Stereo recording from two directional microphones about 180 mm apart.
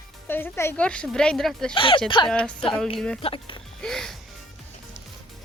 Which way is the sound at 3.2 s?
30° left (ahead or behind).